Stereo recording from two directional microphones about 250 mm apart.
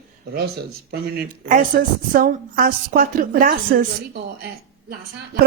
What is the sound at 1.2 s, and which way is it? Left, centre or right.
Speech, right.